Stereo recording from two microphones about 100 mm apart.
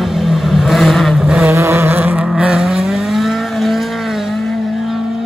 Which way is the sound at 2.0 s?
15° right (ahead or behind).